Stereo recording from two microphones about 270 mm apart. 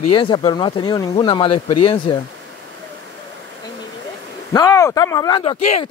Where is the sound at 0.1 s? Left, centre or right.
Centre.